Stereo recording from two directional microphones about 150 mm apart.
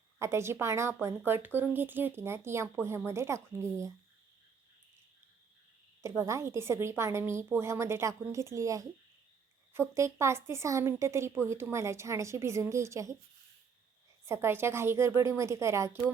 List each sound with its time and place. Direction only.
0.2 s a woman's voice: 15° right (ahead or behind)
6.0 s a woman's voice: 20° right (ahead or behind)
9.9 s a woman's voice: 20° right (ahead or behind)
14.3 s a woman's voice: 15° right (ahead or behind)